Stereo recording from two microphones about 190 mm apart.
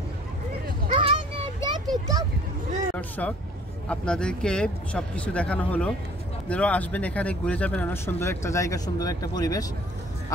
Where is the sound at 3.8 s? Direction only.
5° left (ahead or behind).